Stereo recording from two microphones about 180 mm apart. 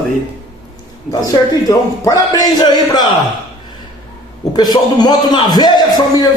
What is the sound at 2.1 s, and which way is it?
A man's voice, 20° left (ahead or behind).